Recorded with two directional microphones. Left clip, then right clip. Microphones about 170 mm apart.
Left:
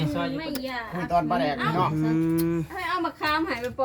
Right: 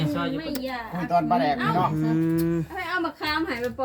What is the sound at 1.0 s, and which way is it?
Speech, 25° left (ahead or behind).